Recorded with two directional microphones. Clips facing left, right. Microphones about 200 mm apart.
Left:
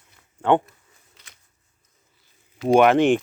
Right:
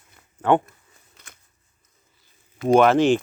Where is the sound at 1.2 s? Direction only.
50° right (ahead or behind).